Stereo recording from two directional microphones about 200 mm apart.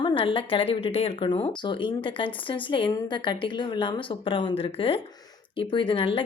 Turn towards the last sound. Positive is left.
turn(degrees=25)  # may be behind; listen again after turning